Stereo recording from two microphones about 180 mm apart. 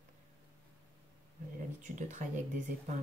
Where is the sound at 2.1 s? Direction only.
45° right (ahead or behind).